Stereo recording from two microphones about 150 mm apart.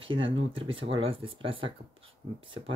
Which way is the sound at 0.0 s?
35° right (ahead or behind).